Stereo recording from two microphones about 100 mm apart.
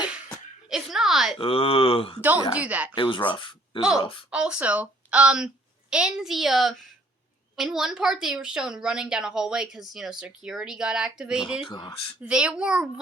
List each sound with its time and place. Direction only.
0.7 s a woman's voice: 5° right (ahead or behind)
1.4 s speech: 65° left (ahead or behind)
2.6 s a woman's voice: 15° right (ahead or behind)
2.9 s speech: 55° left (ahead or behind)
4.3 s a woman's voice: 10° right (ahead or behind)
11.6 s speech: 50° left (ahead or behind)
12.2 s a woman's voice: 10° right (ahead or behind)